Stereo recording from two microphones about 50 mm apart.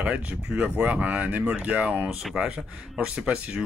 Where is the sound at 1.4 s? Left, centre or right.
Centre.